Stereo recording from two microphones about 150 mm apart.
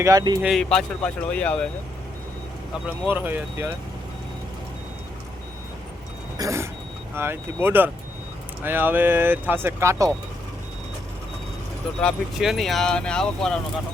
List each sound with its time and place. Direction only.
0.0 s speech: 20° right (ahead or behind)
0.4 s speech: centre (ahead or behind)
3.2 s speech: 15° right (ahead or behind)
6.3 s a sound: 20° right (ahead or behind)
7.2 s speech: 15° right (ahead or behind)
11.9 s speech: centre (ahead or behind)